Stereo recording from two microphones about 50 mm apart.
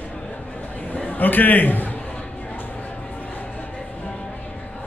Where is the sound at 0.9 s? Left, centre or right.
Left.